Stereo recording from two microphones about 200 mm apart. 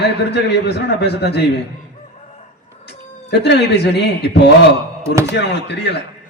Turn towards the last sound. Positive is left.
turn(degrees=55)  # may be behind; listen again after turning